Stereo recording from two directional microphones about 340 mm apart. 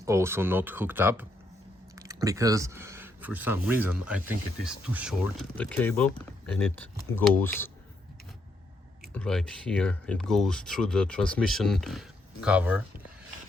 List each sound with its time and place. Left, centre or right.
0.0 s speech: centre
9.1 s speech: centre